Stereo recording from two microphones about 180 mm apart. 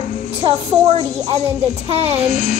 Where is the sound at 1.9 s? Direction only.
35° right (ahead or behind).